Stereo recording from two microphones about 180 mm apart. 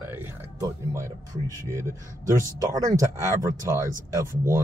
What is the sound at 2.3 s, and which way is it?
Speech, 20° right (ahead or behind).